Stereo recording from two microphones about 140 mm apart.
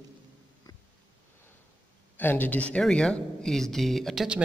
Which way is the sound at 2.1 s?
15° left (ahead or behind).